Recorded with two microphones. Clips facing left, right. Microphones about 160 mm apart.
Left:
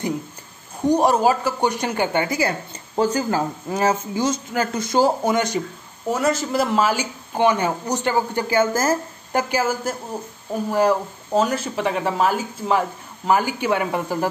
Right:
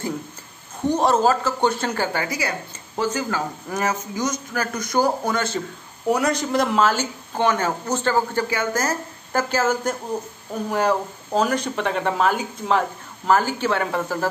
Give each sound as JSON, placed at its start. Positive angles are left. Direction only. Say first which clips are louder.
{"t": 0.8, "sound": "speech", "louder": "left 2 dB", "side_deg": 15}
{"t": 6.0, "sound": "speech", "louder": "even", "side_deg": 0}
{"t": 8.5, "sound": "speech", "louder": "left 5 dB", "side_deg": 25}
{"t": 9.3, "sound": "speech", "louder": "even", "side_deg": 15}